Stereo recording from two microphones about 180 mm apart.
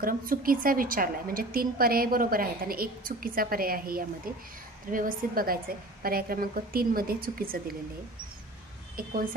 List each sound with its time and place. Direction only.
0.0 s a woman's voice: 50° right (ahead or behind)
8.9 s a woman's voice: 50° right (ahead or behind)